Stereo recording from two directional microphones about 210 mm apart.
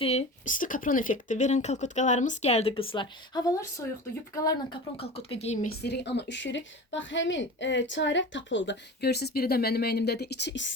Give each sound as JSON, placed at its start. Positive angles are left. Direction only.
{"t": 0.0, "sound": "a woman's voice", "side_deg": 30}
{"t": 5.8, "sound": "speech", "side_deg": 55}